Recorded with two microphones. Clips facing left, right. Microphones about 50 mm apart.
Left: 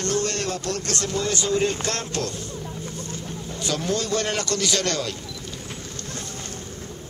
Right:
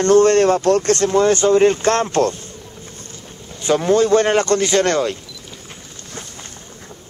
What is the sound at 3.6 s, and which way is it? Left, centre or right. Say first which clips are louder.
Speech: right 11 dB; right.